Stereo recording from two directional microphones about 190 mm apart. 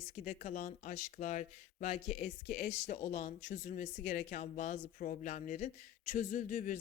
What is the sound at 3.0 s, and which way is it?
A man's voice, 40° left (ahead or behind).